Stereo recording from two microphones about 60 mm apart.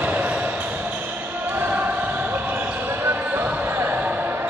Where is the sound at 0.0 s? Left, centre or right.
Right.